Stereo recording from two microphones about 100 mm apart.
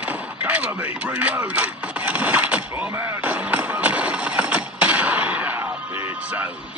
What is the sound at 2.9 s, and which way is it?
Music, 25° right (ahead or behind).